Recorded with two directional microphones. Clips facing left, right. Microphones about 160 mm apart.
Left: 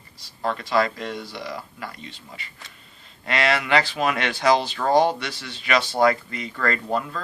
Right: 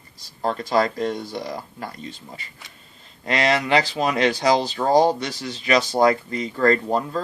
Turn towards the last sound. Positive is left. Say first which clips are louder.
# right 5 dB
turn(degrees=-35)  # may be behind; listen again after turning